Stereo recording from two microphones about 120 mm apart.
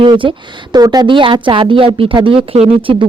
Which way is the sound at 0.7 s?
35° right (ahead or behind).